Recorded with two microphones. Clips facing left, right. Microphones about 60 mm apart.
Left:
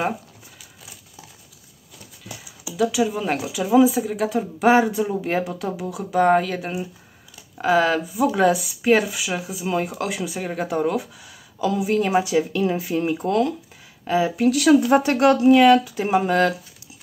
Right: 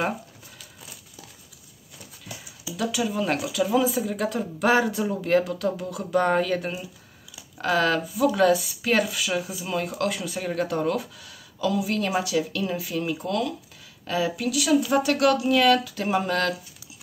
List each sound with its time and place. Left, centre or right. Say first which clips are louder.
2.7 s speech: left 6 dB; centre
3.6 s speech: left 7 dB; centre
14.0 s speech: left 5 dB; centre
14.5 s speech: left 7 dB; left
15.0 s speech: left 4 dB; left